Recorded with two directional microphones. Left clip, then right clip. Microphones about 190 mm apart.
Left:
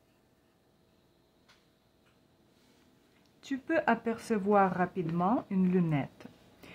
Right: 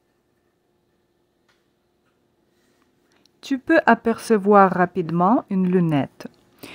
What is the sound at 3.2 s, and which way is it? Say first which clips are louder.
Speech: right 12 dB; 55° right (ahead or behind).